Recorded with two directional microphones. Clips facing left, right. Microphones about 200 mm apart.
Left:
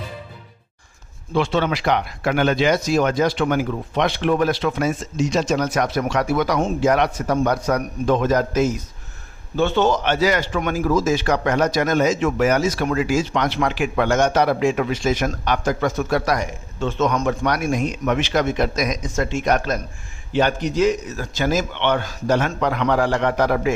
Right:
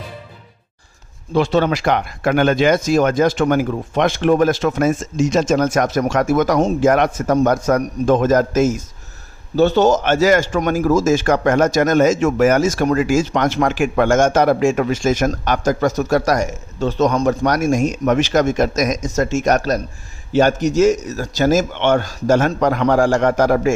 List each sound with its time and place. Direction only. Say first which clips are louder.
1.3 s a man's voice: right 4 dB; 40° right (ahead or behind)